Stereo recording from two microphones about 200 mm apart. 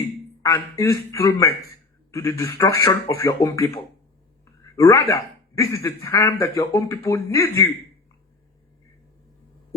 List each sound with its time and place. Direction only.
0.4 s a man's voice: 15° left (ahead or behind)
4.8 s a man's voice: 15° left (ahead or behind)